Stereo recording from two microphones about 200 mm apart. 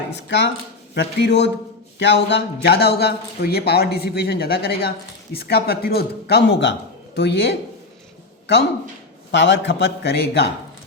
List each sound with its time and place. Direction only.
0.3 s a man's voice: 65° left (ahead or behind)
9.3 s a man's voice: 65° left (ahead or behind)